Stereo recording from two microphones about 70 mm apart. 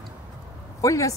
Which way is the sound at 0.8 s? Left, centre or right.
Left.